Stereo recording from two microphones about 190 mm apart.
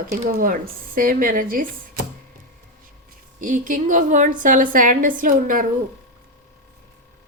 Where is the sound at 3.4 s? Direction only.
45° right (ahead or behind).